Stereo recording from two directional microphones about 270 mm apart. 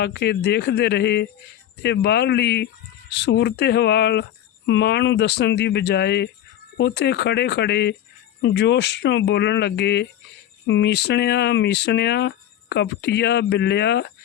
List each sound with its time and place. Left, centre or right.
0.0 s speech: left